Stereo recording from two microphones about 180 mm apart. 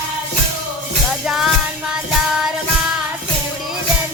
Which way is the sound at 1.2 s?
5° right (ahead or behind).